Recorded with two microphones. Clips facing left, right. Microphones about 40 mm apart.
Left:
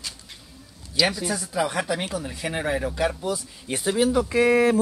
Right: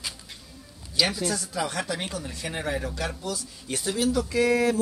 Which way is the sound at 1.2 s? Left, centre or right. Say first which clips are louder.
Left 3 dB; centre.